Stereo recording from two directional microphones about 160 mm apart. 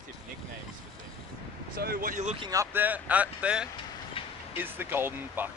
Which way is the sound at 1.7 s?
65° right (ahead or behind).